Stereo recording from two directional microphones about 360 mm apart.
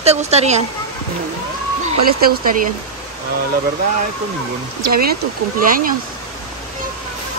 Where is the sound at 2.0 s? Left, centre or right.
Right.